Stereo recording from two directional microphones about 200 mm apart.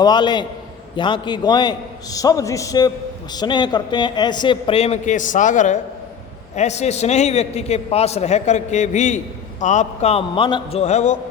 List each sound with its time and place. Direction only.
0.0 s a man's voice: 20° left (ahead or behind)